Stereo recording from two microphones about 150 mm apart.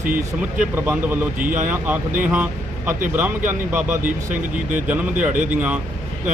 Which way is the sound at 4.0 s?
60° right (ahead or behind).